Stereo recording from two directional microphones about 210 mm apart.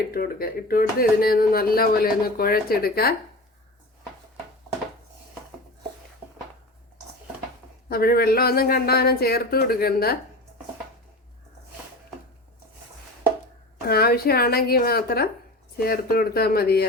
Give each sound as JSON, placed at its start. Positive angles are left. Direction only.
{"t": 0.1, "sound": "speech", "side_deg": 45}
{"t": 7.9, "sound": "speech", "side_deg": 45}
{"t": 13.8, "sound": "speech", "side_deg": 45}